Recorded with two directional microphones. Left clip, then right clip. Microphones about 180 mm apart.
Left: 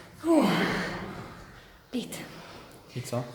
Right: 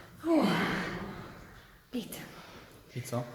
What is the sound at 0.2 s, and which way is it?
Gasp, 15° left (ahead or behind).